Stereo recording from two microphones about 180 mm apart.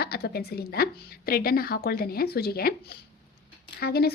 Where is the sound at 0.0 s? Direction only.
60° left (ahead or behind).